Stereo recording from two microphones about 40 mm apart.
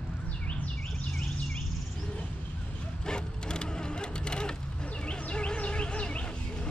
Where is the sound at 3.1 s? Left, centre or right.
Left.